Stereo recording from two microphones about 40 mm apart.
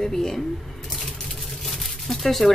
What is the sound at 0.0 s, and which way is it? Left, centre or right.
Speech, centre.